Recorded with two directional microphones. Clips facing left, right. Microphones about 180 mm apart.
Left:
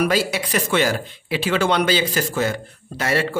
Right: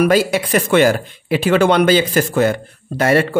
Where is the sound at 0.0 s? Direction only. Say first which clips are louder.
Right 6 dB; 55° right (ahead or behind).